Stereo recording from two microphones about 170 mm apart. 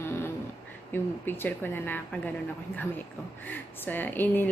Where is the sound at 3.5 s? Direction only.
10° left (ahead or behind).